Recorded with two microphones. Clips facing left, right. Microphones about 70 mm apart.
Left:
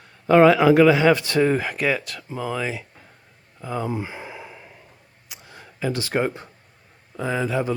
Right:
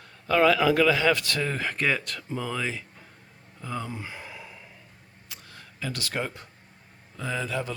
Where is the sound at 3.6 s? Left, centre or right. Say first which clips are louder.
Left 7 dB; centre.